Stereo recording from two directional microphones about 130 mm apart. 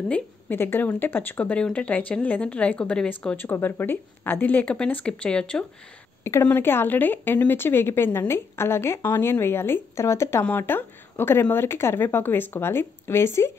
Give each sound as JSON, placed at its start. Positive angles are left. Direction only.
{"t": 0.1, "sound": "speech", "side_deg": 15}
{"t": 6.2, "sound": "speech", "side_deg": 20}